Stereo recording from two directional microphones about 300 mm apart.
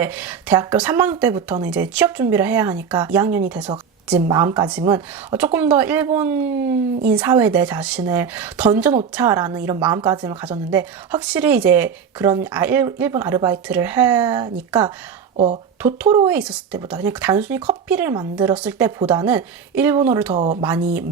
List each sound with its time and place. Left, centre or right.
0.0 s speech: centre
16.2 s speech: centre
20.3 s speech: right